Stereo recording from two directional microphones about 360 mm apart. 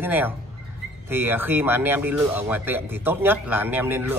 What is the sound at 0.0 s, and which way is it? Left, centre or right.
Speech, centre.